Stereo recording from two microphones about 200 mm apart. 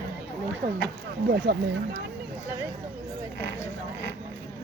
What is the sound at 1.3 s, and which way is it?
Speech, 55° right (ahead or behind).